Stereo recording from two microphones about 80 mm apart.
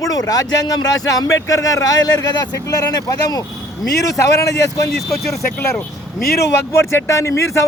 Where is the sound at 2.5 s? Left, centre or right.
Left.